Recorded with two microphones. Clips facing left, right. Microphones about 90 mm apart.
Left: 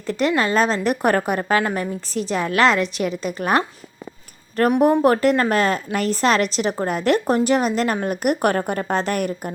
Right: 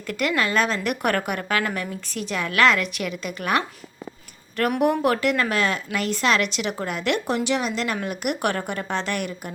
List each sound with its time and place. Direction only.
0.1 s a woman's voice: 30° left (ahead or behind)
4.8 s a woman's voice: 35° left (ahead or behind)